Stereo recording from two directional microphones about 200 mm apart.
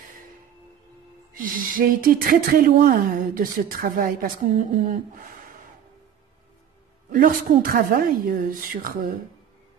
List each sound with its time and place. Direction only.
1.3 s speech: 45° right (ahead or behind)
7.1 s speech: 45° right (ahead or behind)